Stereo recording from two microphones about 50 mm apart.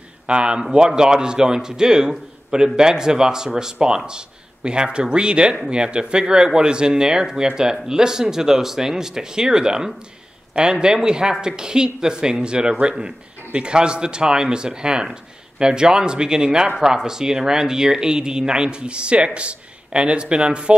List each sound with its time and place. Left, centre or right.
0.3 s speech: right